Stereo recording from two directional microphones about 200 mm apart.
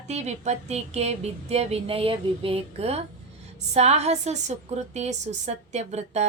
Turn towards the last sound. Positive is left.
turn(degrees=-35)  # may be behind; listen again after turning